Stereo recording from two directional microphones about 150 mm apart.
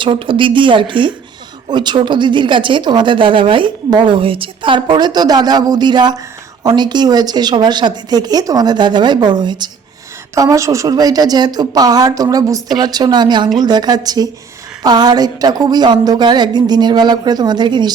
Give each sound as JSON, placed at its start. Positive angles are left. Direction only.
{"t": 0.0, "sound": "speech", "side_deg": -35}